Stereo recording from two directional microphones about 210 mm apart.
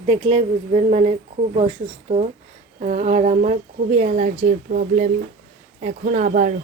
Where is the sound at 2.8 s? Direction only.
35° right (ahead or behind).